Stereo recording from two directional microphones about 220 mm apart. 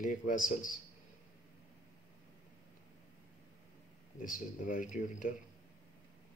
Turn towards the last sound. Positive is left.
turn(degrees=35)  # may be behind; listen again after turning